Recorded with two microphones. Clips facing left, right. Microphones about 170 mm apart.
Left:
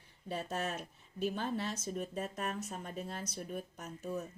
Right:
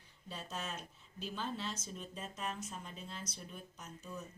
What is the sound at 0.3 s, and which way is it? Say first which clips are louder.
Speech: left 7 dB; 60° left (ahead or behind).